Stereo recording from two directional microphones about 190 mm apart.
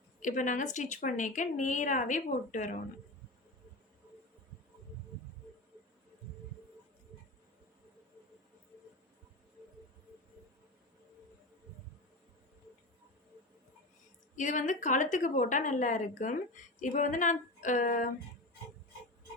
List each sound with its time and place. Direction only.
0.2 s a woman's voice: 40° left (ahead or behind)
14.3 s a woman's voice: 40° left (ahead or behind)